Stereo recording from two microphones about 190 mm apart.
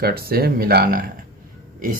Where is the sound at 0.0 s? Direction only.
55° right (ahead or behind).